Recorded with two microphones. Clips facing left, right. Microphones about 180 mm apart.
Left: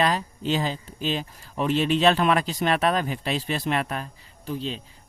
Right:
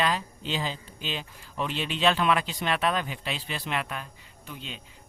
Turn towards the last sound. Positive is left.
turn(degrees=35)  # may be behind; listen again after turning